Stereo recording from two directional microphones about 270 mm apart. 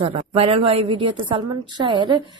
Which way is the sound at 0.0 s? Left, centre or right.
Right.